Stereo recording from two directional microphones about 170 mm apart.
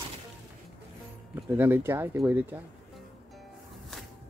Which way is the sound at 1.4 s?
10° right (ahead or behind).